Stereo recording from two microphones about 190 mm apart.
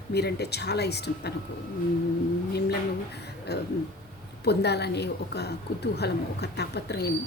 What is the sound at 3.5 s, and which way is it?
A woman's voice, 60° left (ahead or behind).